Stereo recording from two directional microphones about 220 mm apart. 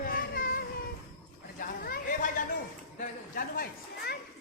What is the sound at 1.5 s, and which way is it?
Chatter, 40° left (ahead or behind).